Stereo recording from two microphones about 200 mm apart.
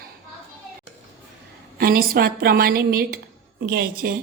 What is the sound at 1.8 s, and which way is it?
Speech, 50° right (ahead or behind).